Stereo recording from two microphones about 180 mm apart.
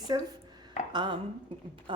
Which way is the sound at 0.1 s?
20° right (ahead or behind).